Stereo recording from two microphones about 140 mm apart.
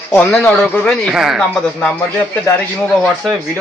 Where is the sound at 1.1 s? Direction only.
Centre (ahead or behind).